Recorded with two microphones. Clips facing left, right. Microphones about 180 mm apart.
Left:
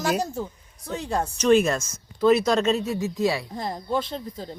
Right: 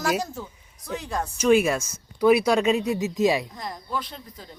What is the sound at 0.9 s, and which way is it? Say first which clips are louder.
Speech: left 3 dB; 30° left (ahead or behind).